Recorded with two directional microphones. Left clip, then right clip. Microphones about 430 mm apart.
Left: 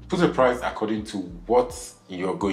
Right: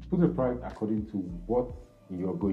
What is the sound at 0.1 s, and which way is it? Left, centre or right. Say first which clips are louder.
Speech: left 8 dB; centre.